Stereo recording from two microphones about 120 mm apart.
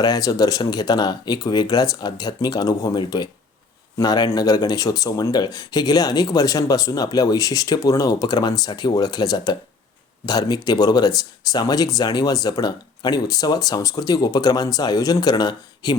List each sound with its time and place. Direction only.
0.0 s speech: 35° left (ahead or behind)